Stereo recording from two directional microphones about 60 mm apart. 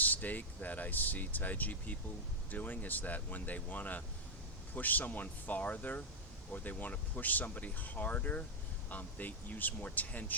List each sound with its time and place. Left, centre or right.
0.0 s speech: left